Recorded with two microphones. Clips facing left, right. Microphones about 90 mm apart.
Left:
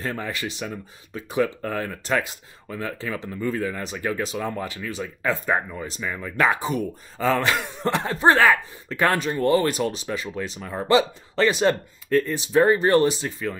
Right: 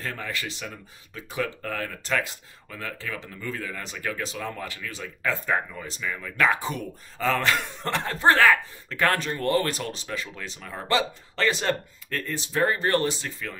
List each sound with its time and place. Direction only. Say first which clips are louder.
0.0 s speech: left 4 dB; 20° left (ahead or behind)